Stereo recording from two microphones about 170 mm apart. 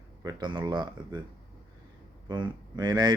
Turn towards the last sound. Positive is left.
turn(degrees=-25)  # may be behind; listen again after turning